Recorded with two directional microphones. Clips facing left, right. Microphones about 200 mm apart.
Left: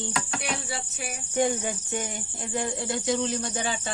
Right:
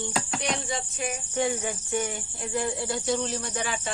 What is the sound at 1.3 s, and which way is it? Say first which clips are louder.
Speech: left 4 dB; 20° left (ahead or behind).